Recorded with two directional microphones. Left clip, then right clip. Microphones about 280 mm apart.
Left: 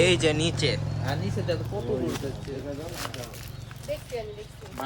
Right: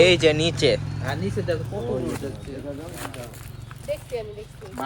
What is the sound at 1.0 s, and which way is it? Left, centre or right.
Speech, centre.